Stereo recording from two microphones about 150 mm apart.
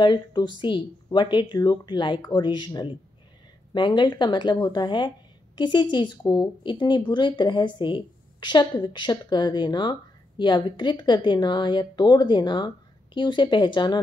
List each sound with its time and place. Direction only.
0.0 s a woman's voice: 30° left (ahead or behind)